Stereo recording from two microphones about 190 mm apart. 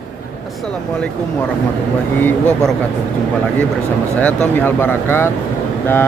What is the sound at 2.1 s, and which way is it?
Speech, 10° left (ahead or behind).